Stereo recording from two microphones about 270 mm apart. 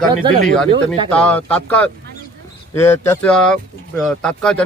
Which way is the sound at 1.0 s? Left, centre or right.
Centre.